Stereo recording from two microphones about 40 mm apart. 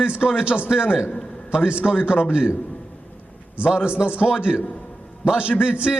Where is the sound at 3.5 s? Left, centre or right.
Right.